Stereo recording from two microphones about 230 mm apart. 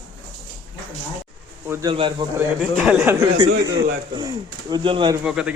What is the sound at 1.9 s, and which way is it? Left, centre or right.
Speech, right.